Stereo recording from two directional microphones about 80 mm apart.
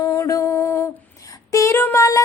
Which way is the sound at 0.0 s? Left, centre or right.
Left.